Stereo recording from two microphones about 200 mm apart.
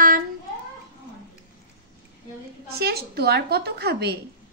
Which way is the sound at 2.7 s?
50° right (ahead or behind).